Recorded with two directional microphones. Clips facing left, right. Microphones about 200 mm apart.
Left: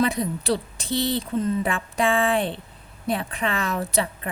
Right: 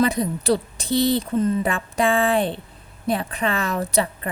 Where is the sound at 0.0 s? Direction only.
40° right (ahead or behind).